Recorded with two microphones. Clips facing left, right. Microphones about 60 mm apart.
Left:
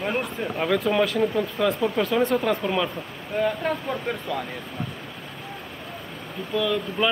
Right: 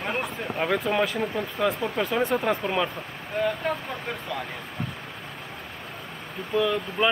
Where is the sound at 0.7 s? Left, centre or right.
Centre.